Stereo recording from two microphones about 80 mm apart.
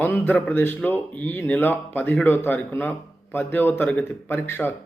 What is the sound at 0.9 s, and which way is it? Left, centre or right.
Speech, left.